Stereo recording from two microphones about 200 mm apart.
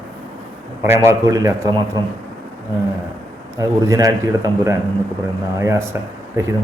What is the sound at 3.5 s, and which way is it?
Speech, 15° right (ahead or behind).